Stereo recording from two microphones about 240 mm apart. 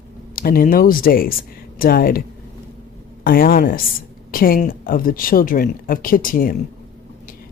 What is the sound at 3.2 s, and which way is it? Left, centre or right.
Speech, left.